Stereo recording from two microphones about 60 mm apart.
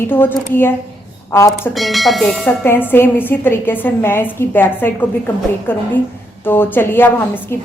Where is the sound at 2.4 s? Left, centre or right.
Left.